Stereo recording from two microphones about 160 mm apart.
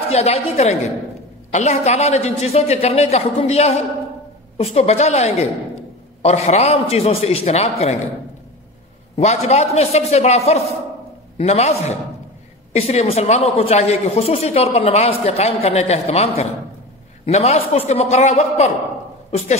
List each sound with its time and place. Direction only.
0.1 s speech: 40° left (ahead or behind)
9.1 s speech: 45° left (ahead or behind)